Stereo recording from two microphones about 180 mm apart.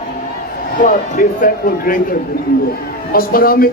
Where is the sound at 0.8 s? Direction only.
45° left (ahead or behind).